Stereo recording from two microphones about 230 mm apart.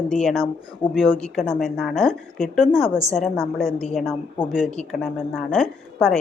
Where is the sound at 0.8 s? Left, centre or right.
Left.